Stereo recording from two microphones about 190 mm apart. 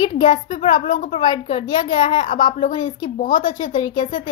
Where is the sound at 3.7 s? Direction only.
25° left (ahead or behind).